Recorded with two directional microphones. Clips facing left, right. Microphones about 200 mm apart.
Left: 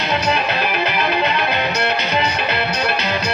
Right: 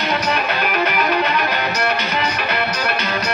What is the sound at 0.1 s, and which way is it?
Music, 30° left (ahead or behind).